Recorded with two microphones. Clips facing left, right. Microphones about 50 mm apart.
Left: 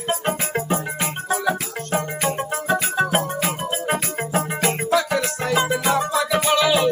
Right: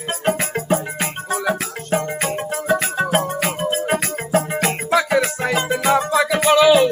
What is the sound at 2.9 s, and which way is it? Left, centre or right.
Music, centre.